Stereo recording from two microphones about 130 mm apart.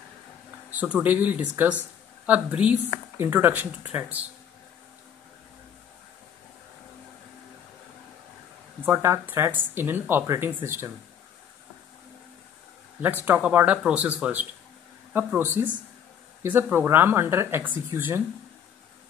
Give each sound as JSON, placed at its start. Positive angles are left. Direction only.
{"t": 0.7, "sound": "speech", "side_deg": -10}
{"t": 8.8, "sound": "speech", "side_deg": -20}
{"t": 13.0, "sound": "speech", "side_deg": -15}